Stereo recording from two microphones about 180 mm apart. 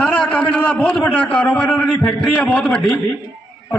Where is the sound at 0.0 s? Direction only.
5° left (ahead or behind).